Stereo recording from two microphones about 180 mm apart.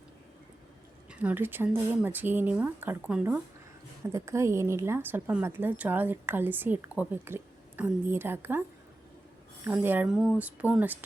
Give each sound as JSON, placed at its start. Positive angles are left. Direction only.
{"t": 1.1, "sound": "a woman's voice", "side_deg": -10}
{"t": 9.6, "sound": "a woman's voice", "side_deg": -10}